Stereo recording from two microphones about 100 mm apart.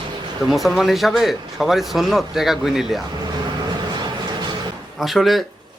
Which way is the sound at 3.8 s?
45° right (ahead or behind).